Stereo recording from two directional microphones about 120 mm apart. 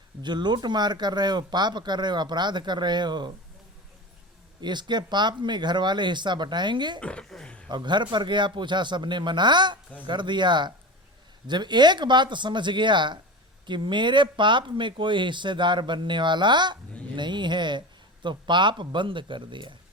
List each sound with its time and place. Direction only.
0.2 s speech: 40° right (ahead or behind)
4.6 s speech: 40° right (ahead or behind)
7.0 s a sound: 10° left (ahead or behind)
7.7 s speech: 40° right (ahead or behind)